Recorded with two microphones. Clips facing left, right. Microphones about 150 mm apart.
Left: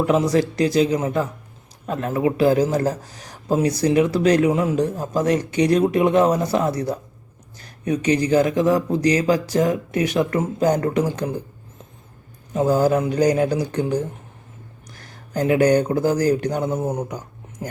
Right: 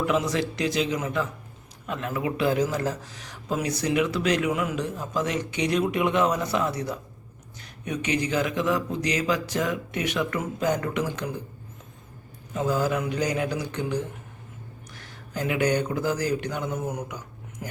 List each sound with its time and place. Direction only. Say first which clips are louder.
0.0 s speech: left 7 dB; 35° left (ahead or behind)
12.5 s speech: left 8 dB; 40° left (ahead or behind)